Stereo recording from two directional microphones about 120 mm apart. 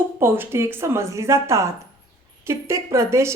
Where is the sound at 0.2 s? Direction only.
20° right (ahead or behind).